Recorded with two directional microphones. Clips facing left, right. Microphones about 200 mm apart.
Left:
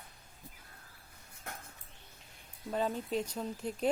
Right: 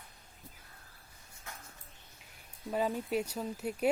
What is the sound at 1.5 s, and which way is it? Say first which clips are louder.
Dishes: left 4 dB; 60° left (ahead or behind).